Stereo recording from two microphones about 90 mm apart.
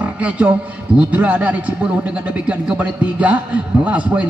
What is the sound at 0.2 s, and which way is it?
A man's voice, 15° right (ahead or behind).